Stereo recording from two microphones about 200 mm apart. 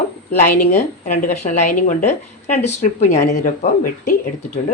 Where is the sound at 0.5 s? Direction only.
40° left (ahead or behind).